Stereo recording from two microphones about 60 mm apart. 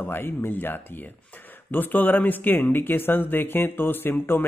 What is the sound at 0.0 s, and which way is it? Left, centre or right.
Speech, left.